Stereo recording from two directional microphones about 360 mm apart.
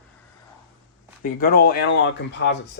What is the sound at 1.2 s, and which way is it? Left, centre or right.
Speech, left.